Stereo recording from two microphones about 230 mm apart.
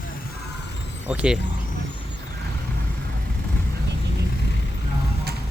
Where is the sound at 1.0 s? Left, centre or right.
Centre.